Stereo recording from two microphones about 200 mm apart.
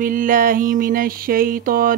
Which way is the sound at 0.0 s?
45° right (ahead or behind).